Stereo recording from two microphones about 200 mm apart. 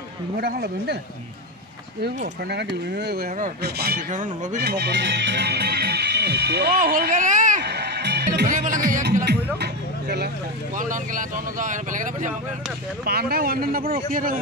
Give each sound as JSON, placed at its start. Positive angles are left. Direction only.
{"t": 0.4, "sound": "speech", "side_deg": -50}
{"t": 2.5, "sound": "speech", "side_deg": -55}
{"t": 4.6, "sound": "speech", "side_deg": -55}
{"t": 7.6, "sound": "music", "side_deg": -55}
{"t": 8.5, "sound": "speech", "side_deg": -40}
{"t": 9.2, "sound": "a sound", "side_deg": -55}
{"t": 10.8, "sound": "speech", "side_deg": -40}
{"t": 13.0, "sound": "speech", "side_deg": -50}